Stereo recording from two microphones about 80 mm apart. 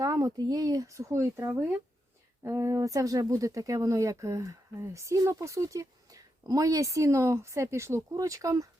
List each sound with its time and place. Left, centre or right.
0.0 s speech: right